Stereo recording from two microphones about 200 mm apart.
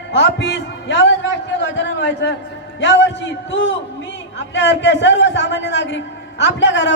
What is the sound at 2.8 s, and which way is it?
A man's voice, 60° left (ahead or behind).